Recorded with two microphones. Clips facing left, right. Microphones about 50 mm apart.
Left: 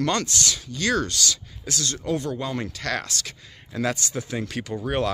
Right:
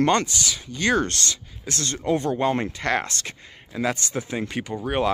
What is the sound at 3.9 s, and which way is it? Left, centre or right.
Speech, right.